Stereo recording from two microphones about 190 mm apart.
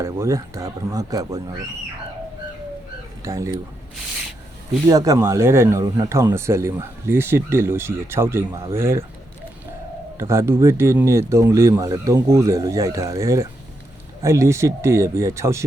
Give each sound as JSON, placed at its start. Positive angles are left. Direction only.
{"t": 0.0, "sound": "speech", "side_deg": -15}
{"t": 3.2, "sound": "speech", "side_deg": -15}
{"t": 4.9, "sound": "speech", "side_deg": -20}
{"t": 10.2, "sound": "speech", "side_deg": -15}